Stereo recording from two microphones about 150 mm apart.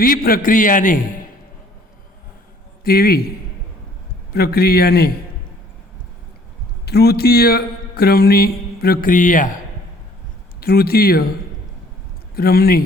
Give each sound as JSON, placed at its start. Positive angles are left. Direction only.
{"t": 0.0, "sound": "a man's voice", "side_deg": 75}
{"t": 2.8, "sound": "a man's voice", "side_deg": 90}
{"t": 4.3, "sound": "a man's voice", "side_deg": 90}
{"t": 6.8, "sound": "a man's voice", "side_deg": 90}
{"t": 10.6, "sound": "a man's voice", "side_deg": 90}
{"t": 12.4, "sound": "a man's voice", "side_deg": 90}